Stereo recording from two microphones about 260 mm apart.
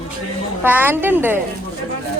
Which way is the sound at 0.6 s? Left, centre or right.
Centre.